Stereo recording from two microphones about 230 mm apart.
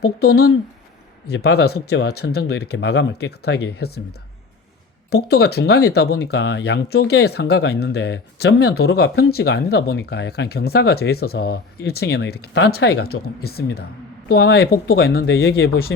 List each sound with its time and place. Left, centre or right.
0.0 s speech: left
5.1 s speech: left